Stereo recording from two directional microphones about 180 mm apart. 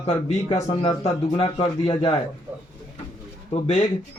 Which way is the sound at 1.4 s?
25° left (ahead or behind).